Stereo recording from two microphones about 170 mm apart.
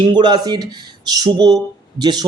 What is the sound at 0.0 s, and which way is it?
Speech, 25° right (ahead or behind).